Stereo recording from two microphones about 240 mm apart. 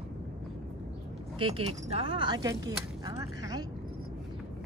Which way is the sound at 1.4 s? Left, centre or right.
Right.